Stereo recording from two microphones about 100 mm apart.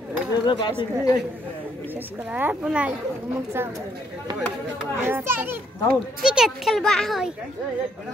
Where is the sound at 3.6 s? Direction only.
25° right (ahead or behind).